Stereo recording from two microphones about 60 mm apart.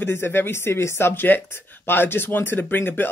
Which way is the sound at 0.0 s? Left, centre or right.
Left.